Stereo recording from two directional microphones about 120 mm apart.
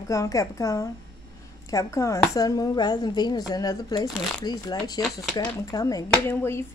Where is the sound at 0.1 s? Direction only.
30° left (ahead or behind).